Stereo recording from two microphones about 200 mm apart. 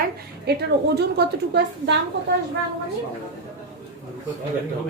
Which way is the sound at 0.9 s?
55° right (ahead or behind).